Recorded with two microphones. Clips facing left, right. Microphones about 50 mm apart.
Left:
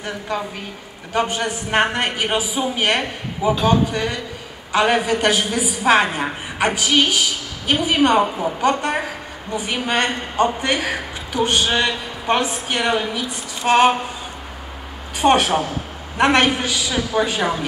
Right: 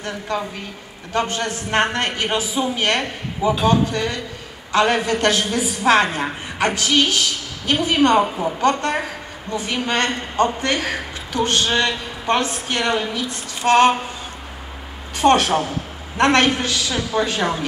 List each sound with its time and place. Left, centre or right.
0.0 s a woman's voice: centre
8.5 s a woman's voice: centre
9.5 s a woman's voice: centre
15.1 s a woman's voice: centre